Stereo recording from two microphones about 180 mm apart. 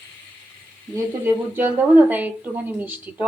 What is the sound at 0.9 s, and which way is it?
Speech, 10° right (ahead or behind).